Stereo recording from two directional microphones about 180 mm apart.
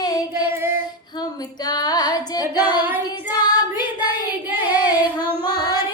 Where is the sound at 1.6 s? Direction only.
20° left (ahead or behind).